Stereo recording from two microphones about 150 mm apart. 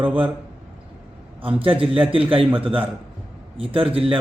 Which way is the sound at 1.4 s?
35° right (ahead or behind).